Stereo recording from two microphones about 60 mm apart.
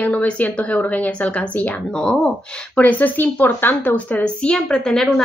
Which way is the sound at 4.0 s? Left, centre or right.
Left.